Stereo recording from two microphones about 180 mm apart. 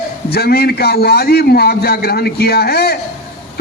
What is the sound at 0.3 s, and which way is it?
A man's voice, 60° left (ahead or behind).